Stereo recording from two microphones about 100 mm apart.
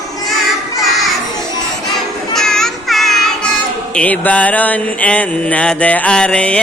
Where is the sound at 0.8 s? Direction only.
Centre (ahead or behind).